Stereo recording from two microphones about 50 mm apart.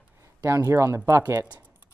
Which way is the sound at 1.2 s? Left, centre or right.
Right.